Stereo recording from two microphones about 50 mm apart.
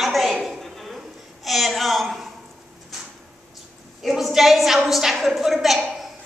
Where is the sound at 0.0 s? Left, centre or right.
Centre.